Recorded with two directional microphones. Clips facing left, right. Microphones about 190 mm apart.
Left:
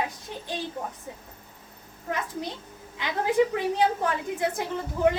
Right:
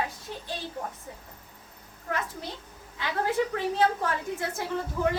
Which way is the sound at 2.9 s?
15° left (ahead or behind).